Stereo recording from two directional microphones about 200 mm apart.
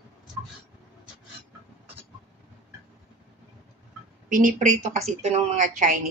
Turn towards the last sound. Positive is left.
turn(degrees=-40)  # may be behind; listen again after turning